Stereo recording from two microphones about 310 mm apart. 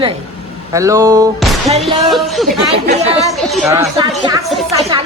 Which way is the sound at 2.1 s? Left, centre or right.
Centre.